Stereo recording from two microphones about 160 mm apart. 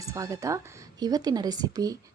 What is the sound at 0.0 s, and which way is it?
Speech, 20° right (ahead or behind).